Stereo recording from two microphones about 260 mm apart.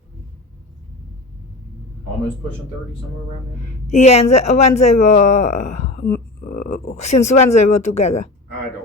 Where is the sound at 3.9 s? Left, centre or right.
Left.